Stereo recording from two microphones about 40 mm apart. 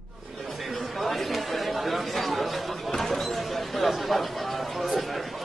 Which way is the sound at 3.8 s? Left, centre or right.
Centre.